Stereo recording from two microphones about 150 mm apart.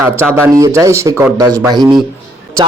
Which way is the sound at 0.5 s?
20° right (ahead or behind).